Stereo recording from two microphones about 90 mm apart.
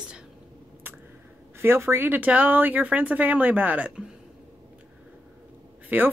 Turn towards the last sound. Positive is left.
turn(degrees=-20)  # may be behind; listen again after turning